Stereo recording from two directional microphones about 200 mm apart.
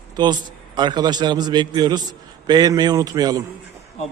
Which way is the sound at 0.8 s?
20° right (ahead or behind).